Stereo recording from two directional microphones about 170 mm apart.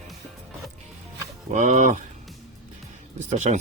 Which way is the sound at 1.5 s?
45° right (ahead or behind).